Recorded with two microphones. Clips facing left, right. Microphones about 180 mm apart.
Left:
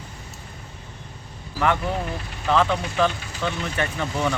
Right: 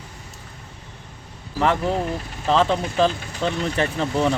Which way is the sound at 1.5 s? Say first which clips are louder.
Right 2 dB; 30° right (ahead or behind).